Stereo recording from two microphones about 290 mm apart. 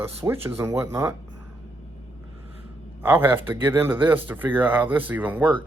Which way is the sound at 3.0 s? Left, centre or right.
Centre.